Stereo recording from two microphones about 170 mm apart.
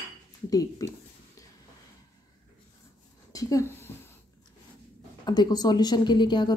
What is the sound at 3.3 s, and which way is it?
Speech, 20° left (ahead or behind).